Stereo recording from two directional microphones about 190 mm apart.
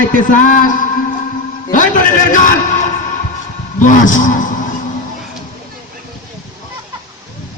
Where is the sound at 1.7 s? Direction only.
45° left (ahead or behind).